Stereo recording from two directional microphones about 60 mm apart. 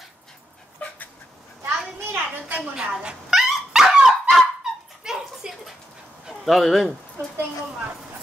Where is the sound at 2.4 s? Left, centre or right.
Centre.